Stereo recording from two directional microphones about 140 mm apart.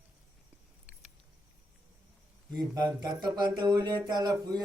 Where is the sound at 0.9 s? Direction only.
10° right (ahead or behind).